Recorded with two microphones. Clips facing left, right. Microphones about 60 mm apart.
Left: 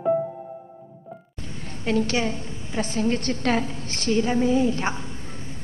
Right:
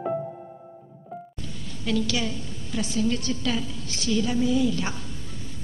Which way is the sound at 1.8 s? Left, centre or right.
Left.